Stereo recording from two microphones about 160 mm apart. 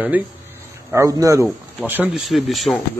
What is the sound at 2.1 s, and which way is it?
Speech, centre (ahead or behind).